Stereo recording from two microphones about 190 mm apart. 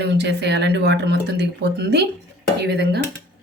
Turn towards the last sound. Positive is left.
turn(degrees=-60)  # may be behind; listen again after turning